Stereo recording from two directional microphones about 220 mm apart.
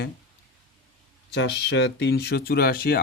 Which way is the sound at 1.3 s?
55° left (ahead or behind).